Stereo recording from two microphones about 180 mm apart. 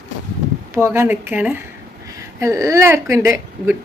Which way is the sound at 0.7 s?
15° right (ahead or behind).